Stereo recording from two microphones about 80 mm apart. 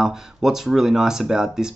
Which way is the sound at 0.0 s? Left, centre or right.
Centre.